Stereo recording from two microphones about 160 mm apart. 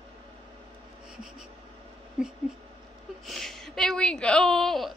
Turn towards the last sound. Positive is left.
turn(degrees=0)  # may be behind; listen again after turning